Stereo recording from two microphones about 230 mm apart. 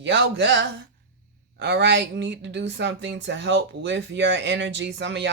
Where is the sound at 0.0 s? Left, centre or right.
Right.